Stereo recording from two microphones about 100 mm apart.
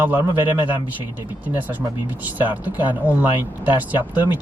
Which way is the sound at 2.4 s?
20° right (ahead or behind).